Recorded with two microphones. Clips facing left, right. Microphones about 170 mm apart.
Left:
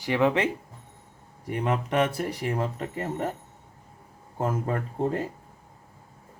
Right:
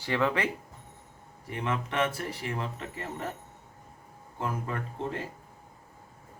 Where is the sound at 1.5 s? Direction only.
40° left (ahead or behind).